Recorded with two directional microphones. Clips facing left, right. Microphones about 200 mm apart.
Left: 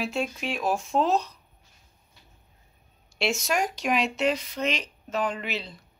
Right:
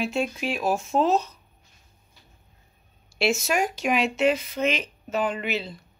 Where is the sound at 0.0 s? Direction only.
Centre (ahead or behind).